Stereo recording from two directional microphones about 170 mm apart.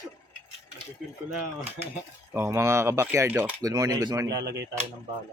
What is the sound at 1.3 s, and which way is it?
Speech, 10° right (ahead or behind).